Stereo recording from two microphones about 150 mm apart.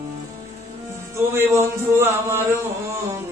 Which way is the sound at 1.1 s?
20° right (ahead or behind).